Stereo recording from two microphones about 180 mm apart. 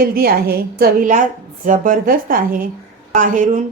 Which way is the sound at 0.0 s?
55° right (ahead or behind).